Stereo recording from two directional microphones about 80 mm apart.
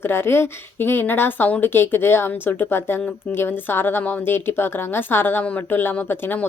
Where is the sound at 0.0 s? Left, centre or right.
Left.